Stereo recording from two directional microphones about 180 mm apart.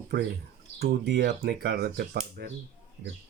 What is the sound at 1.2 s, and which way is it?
Speech, 65° right (ahead or behind).